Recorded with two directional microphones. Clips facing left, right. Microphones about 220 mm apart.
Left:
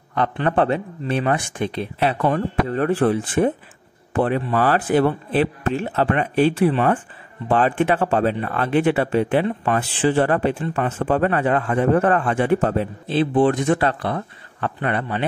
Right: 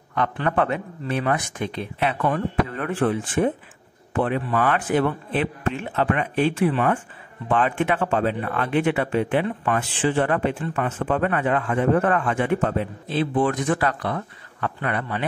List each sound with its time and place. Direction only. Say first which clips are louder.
0.5 s a man's voice: left 5 dB; 30° left (ahead or behind)